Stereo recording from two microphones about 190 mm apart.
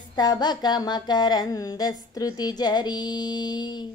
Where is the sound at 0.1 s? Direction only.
20° left (ahead or behind).